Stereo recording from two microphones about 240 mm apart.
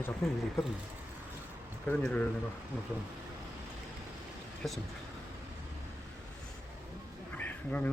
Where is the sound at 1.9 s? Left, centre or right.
Centre.